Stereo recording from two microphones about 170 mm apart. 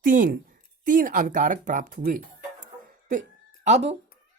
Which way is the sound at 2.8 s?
50° right (ahead or behind).